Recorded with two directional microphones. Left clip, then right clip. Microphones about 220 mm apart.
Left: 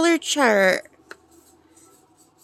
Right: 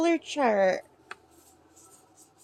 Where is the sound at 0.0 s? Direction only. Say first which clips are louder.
Left 6 dB; 40° left (ahead or behind).